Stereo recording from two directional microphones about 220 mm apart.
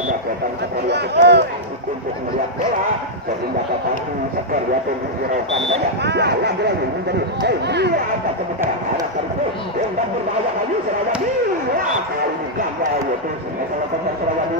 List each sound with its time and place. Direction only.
0.8 s speech: 50° right (ahead or behind)
6.0 s speech: 50° right (ahead or behind)